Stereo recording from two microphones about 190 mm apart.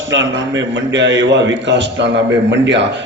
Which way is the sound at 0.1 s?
70° right (ahead or behind).